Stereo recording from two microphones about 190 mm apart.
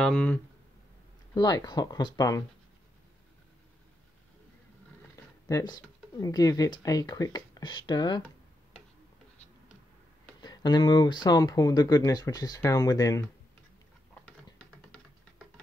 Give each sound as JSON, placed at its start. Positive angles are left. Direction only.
{"t": 0.0, "sound": "speech", "side_deg": 5}
{"t": 1.3, "sound": "speech", "side_deg": 20}
{"t": 5.1, "sound": "speech", "side_deg": 20}
{"t": 10.4, "sound": "speech", "side_deg": 20}
{"t": 14.9, "sound": "music", "side_deg": 5}